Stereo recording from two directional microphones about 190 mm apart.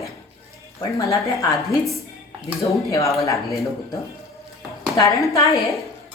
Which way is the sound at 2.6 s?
15° left (ahead or behind).